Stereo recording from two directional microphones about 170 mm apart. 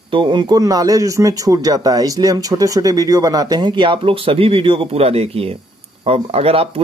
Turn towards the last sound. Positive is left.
turn(degrees=-35)  # may be behind; listen again after turning